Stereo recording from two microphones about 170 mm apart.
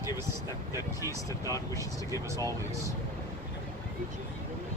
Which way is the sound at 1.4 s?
20° left (ahead or behind).